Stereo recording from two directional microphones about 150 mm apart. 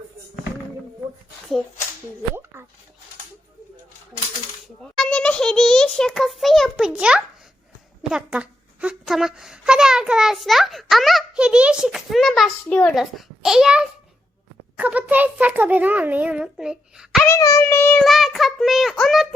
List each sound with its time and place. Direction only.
4.8 s a child's voice: 5° left (ahead or behind)
17.2 s a child's voice: 20° left (ahead or behind)
18.0 s a child's voice: centre (ahead or behind)